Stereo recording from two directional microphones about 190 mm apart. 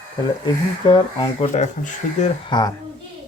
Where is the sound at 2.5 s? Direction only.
20° left (ahead or behind).